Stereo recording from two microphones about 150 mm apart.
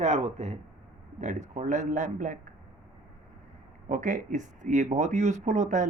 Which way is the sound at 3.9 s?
60° right (ahead or behind).